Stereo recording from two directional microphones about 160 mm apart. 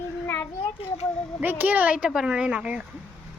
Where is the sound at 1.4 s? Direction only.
10° right (ahead or behind).